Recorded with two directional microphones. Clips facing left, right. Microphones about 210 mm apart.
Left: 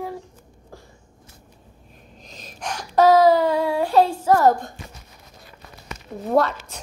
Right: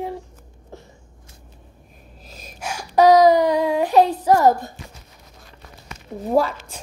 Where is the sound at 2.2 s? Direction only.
5° right (ahead or behind).